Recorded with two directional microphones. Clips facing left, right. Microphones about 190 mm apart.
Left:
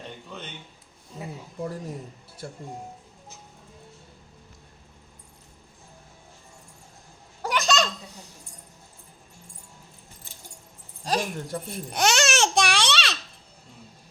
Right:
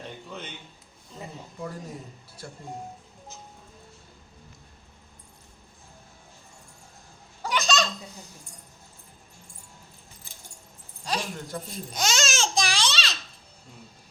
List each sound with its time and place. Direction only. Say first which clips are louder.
1.2 s speech: left 3 dB; 10° left (ahead or behind)
7.4 s baby laughter: left 2 dB; 55° left (ahead or behind)
11.0 s babbling: left 4 dB; 45° left (ahead or behind); by 13.1 s 65° left (ahead or behind)